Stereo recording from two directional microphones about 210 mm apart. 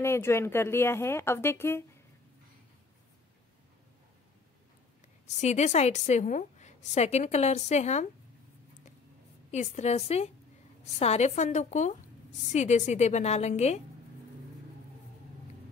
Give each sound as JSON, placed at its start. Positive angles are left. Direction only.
{"t": 0.0, "sound": "speech", "side_deg": 10}
{"t": 5.2, "sound": "a woman's voice", "side_deg": 35}
{"t": 9.5, "sound": "a woman's voice", "side_deg": 35}